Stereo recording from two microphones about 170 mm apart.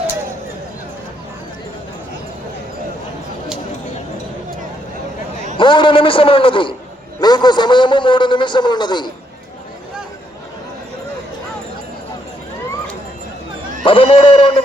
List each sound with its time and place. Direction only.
5.5 s a sound: 30° left (ahead or behind)
7.2 s a man's voice: 25° left (ahead or behind)
13.8 s speech: 30° left (ahead or behind)